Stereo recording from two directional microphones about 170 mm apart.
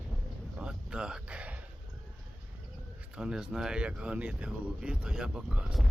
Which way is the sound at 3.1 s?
5° right (ahead or behind).